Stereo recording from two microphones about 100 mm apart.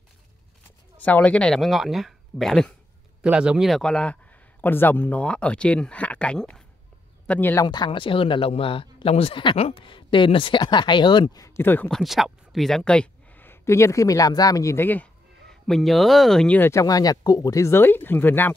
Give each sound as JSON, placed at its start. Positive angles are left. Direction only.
{"t": 0.7, "sound": "speech", "side_deg": 15}
{"t": 3.2, "sound": "speech", "side_deg": -10}
{"t": 3.7, "sound": "a man's voice", "side_deg": 10}
{"t": 7.6, "sound": "speech", "side_deg": 45}
{"t": 9.6, "sound": "speech", "side_deg": 70}
{"t": 11.4, "sound": "speech", "side_deg": 25}
{"t": 11.9, "sound": "speech", "side_deg": 0}
{"t": 15.6, "sound": "speech", "side_deg": 0}
{"t": 16.5, "sound": "speech", "side_deg": 20}
{"t": 16.8, "sound": "speech", "side_deg": 40}